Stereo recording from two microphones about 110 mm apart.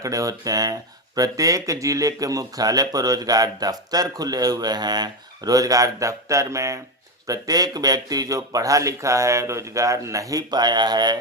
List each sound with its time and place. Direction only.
0.0 s speech: 30° right (ahead or behind)